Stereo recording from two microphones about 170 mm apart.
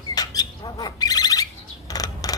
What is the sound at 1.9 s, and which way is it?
Scissors, 20° left (ahead or behind).